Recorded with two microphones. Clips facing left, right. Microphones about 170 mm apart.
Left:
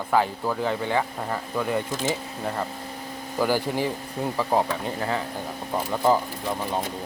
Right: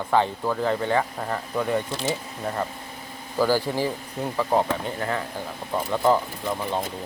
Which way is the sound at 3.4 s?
15° left (ahead or behind).